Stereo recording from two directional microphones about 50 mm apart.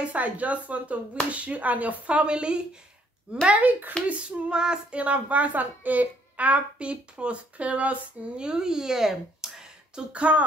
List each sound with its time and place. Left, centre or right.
0.0 s a woman's voice: right
3.4 s speech: right
4.1 s female singing: centre
5.0 s a woman's voice: right
8.5 s speech: centre
10.1 s a woman's voice: right